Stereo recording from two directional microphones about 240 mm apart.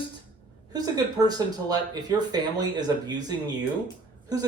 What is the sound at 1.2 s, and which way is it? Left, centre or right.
Speech, centre.